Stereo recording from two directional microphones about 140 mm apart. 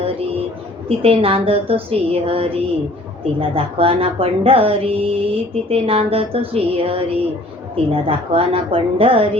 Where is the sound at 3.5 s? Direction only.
40° right (ahead or behind).